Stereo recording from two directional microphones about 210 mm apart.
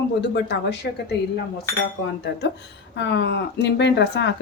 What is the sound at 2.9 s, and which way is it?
A woman's voice, 55° left (ahead or behind).